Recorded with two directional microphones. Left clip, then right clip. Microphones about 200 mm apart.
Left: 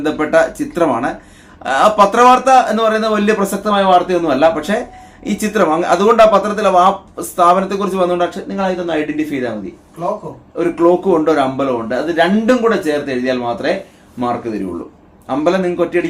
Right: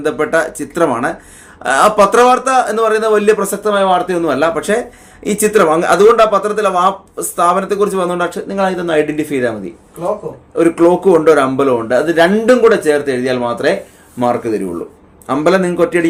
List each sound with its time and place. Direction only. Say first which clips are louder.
0.0 s a man's voice: left 1 dB; 50° right (ahead or behind)
10.6 s a man's voice: right 3 dB; 50° right (ahead or behind)